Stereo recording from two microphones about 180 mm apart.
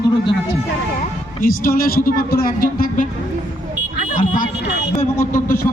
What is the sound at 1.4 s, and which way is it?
Speech, 50° left (ahead or behind).